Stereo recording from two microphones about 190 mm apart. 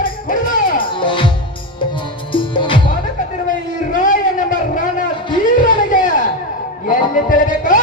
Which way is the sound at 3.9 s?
45° left (ahead or behind).